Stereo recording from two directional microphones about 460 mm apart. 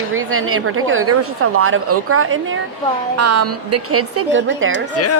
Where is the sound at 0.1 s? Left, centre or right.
Right.